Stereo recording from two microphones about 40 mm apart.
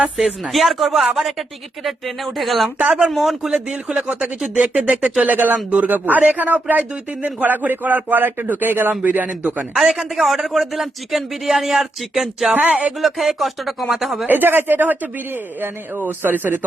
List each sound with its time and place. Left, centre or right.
0.2 s speech: centre
2.7 s speech: right
3.1 s speech: centre
3.5 s speech: centre
5.2 s a man's voice: right
9.0 s a man's voice: right
9.7 s speech: centre
14.3 s speech: right